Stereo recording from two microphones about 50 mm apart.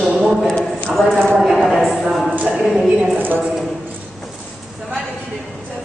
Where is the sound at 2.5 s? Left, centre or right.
Centre.